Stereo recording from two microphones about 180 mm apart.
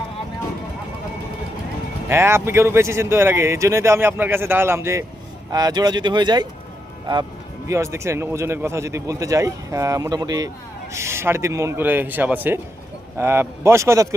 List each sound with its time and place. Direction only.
2.0 s speech: 15° right (ahead or behind)
7.7 s speech: 15° right (ahead or behind)